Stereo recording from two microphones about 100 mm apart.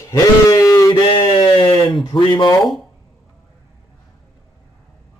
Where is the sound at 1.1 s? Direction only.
60° left (ahead or behind).